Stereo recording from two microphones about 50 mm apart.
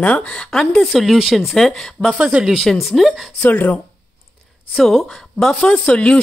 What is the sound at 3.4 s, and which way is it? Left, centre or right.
Speech, left.